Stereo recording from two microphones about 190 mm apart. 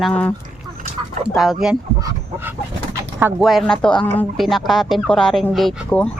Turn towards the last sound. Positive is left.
turn(degrees=5)  # may be behind; listen again after turning